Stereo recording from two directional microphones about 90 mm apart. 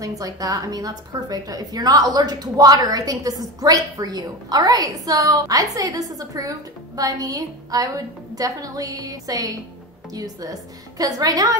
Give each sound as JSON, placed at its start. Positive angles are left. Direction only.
{"t": 0.0, "sound": "a woman's voice", "side_deg": -40}